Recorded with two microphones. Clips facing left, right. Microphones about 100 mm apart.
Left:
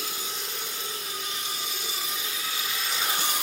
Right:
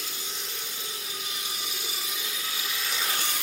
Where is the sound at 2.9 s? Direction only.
15° left (ahead or behind).